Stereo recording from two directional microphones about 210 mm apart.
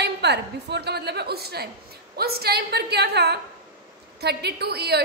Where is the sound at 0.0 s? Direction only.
55° right (ahead or behind).